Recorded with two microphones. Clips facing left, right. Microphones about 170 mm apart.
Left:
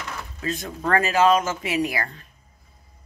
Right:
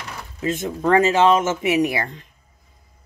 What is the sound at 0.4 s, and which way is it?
Speech, 25° right (ahead or behind).